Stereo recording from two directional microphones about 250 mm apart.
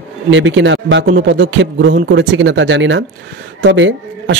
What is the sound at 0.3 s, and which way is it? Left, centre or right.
Speech, right.